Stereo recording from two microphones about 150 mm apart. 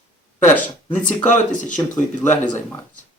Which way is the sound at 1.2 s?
55° left (ahead or behind).